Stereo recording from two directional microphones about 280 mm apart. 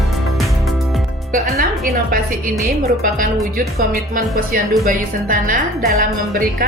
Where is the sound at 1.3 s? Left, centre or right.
Right.